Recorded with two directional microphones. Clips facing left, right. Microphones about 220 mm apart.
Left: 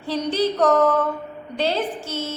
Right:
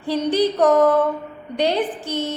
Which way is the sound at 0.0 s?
15° right (ahead or behind).